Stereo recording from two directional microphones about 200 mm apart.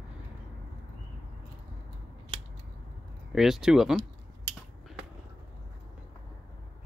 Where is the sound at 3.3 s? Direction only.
Centre (ahead or behind).